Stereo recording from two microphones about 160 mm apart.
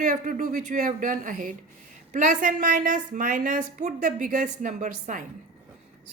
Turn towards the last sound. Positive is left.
turn(degrees=-50)  # may be behind; listen again after turning